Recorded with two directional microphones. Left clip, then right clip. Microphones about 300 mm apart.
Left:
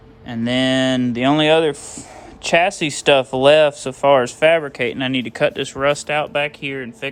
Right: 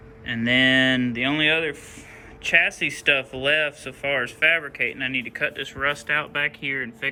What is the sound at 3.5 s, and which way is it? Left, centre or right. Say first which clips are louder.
Speech: left 10 dB; left.